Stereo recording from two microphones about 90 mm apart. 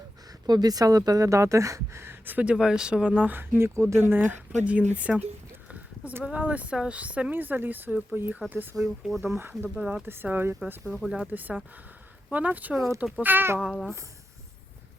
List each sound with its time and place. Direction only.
0.4 s speech: 50° right (ahead or behind); by 5.2 s 15° right (ahead or behind)
6.2 s speech: 15° right (ahead or behind)
8.7 s speech: centre (ahead or behind)
9.2 s speech: 25° right (ahead or behind)
10.8 s speech: centre (ahead or behind)
11.3 s speech: 20° right (ahead or behind)
13.6 s speech: 5° left (ahead or behind)